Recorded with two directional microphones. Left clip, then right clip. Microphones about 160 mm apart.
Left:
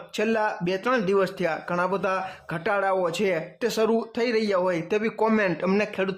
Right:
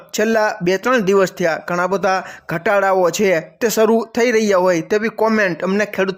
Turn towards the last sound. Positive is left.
turn(degrees=-30)  # may be behind; listen again after turning